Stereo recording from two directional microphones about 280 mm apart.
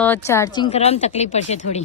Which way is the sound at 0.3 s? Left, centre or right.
Centre.